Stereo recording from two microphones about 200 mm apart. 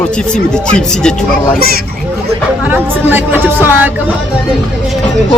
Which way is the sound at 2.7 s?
10° right (ahead or behind).